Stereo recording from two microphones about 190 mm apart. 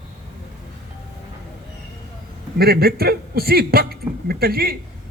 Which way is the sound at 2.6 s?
55° right (ahead or behind).